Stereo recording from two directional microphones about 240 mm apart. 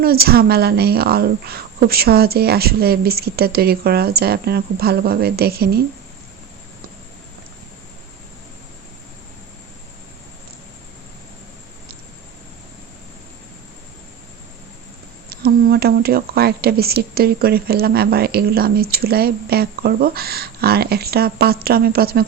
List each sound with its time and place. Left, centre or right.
0.0 s speech: right
15.3 s speech: right